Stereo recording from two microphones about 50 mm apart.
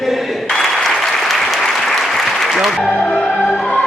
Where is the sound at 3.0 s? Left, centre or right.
Left.